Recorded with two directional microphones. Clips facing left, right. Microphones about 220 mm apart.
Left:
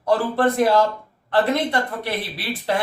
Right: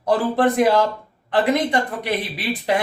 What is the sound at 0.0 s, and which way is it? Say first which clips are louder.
A man's voice: right 1 dB; 15° right (ahead or behind).